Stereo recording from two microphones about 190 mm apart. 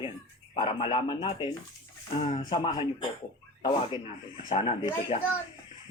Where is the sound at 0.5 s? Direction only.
25° left (ahead or behind).